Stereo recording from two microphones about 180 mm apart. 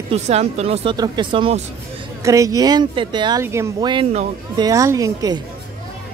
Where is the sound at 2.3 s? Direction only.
20° right (ahead or behind).